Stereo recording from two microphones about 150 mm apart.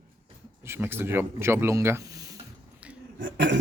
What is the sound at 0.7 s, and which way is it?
Speech, 15° right (ahead or behind).